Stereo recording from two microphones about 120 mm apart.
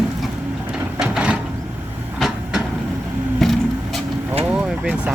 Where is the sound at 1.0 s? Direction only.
10° right (ahead or behind).